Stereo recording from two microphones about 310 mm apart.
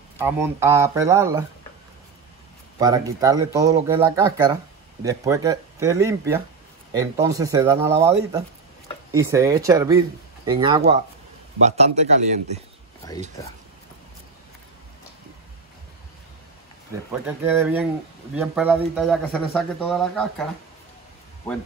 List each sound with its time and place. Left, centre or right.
0.2 s speech: centre
2.8 s speech: centre
13.0 s speech: centre
17.4 s speech: centre